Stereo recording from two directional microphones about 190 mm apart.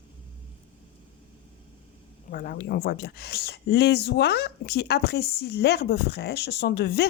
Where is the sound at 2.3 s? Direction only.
50° left (ahead or behind).